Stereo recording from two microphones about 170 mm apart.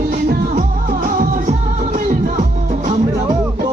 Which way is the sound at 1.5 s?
45° right (ahead or behind).